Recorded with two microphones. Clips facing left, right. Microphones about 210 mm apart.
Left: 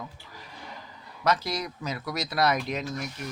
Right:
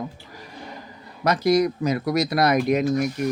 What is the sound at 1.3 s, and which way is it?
Speech, 15° right (ahead or behind).